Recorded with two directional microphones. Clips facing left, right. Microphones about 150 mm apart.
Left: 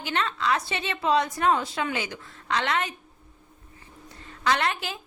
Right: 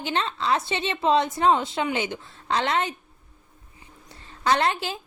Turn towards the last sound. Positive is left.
turn(degrees=-30)  # may be behind; listen again after turning